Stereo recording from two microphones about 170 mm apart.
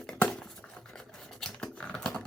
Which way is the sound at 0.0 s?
Centre (ahead or behind).